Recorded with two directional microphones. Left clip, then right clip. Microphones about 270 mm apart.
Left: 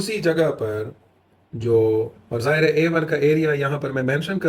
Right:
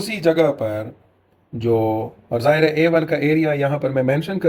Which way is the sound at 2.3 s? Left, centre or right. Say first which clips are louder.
Right 4 dB; right.